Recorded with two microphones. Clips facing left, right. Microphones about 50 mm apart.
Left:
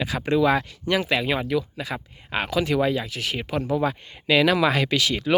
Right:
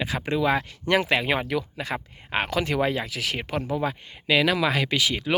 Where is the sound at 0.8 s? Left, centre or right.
Right.